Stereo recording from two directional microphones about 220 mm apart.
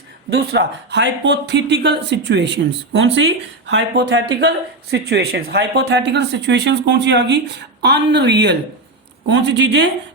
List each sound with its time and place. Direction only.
0.3 s speech: 50° right (ahead or behind)